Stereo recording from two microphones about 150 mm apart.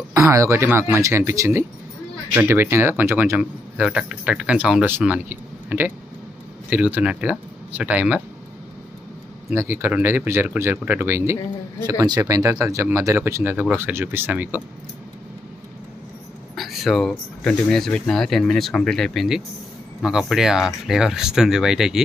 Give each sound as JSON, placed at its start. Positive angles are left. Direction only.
{"t": 0.1, "sound": "speech", "side_deg": -20}
{"t": 9.5, "sound": "speech", "side_deg": -15}
{"t": 16.5, "sound": "speech", "side_deg": 0}